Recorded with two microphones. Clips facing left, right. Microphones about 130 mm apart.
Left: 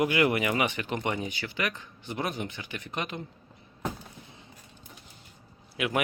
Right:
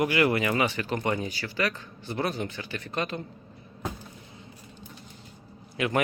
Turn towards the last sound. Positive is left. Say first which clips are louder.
# right 2 dB
turn(degrees=10)  # may be behind; listen again after turning